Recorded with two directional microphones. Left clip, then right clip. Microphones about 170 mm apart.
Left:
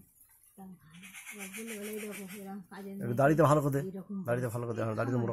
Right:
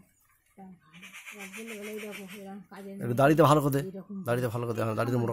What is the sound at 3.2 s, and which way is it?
Speech, 25° right (ahead or behind).